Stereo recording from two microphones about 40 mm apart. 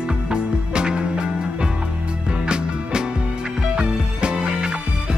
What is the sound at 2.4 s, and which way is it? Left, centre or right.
Music, right.